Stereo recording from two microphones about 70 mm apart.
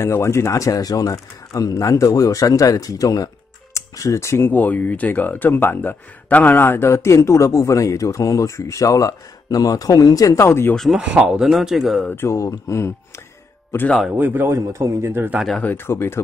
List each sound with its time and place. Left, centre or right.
0.0 s speech: left
4.5 s speech: left
10.4 s speech: left
11.0 s speech: centre
11.2 s speech: centre
12.3 s speech: left
14.1 s speech: right
14.4 s a man's voice: right
15.6 s speech: left